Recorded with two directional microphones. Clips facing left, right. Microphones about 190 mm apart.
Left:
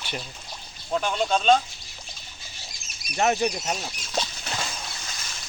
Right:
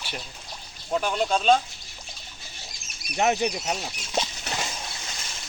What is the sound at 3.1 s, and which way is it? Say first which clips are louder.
Speech: even; 15° right (ahead or behind).